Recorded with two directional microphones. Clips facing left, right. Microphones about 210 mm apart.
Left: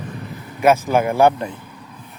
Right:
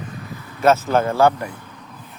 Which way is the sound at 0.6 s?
10° left (ahead or behind).